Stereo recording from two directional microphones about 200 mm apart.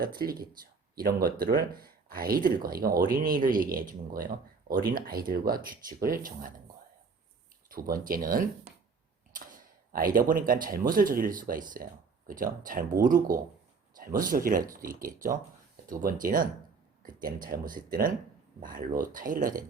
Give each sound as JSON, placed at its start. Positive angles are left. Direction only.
{"t": 0.0, "sound": "speech", "side_deg": -50}
{"t": 7.7, "sound": "speech", "side_deg": -45}
{"t": 8.7, "sound": "a sound", "side_deg": -50}
{"t": 9.9, "sound": "speech", "side_deg": -45}